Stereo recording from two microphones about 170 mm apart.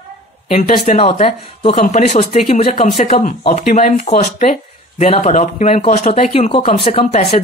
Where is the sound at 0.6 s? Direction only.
40° left (ahead or behind).